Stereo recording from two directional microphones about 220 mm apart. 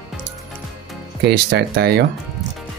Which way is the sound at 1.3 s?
50° right (ahead or behind).